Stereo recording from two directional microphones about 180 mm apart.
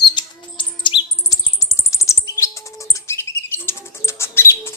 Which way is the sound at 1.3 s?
15° left (ahead or behind).